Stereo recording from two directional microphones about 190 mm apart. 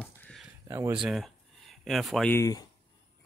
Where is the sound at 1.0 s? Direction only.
Centre (ahead or behind).